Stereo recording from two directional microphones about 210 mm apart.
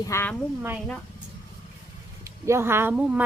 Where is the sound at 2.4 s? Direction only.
10° right (ahead or behind).